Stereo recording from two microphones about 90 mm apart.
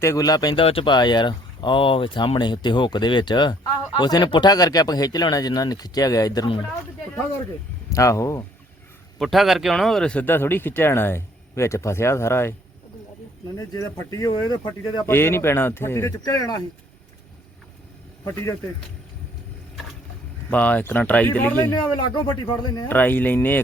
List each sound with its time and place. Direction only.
0.0 s speech: 40° left (ahead or behind)
0.5 s speech: 90° left
0.9 s speech: 55° left (ahead or behind)
7.9 s speech: 35° left (ahead or behind)
9.1 s speech: centre (ahead or behind)
10.2 s speech: 25° left (ahead or behind)
13.6 s speech: 40° left (ahead or behind)
15.0 s speech: 25° left (ahead or behind)
16.2 s speech: 45° left (ahead or behind)
20.5 s speech: 20° left (ahead or behind)
22.1 s speech: 55° left (ahead or behind)
22.9 s speech: 20° left (ahead or behind)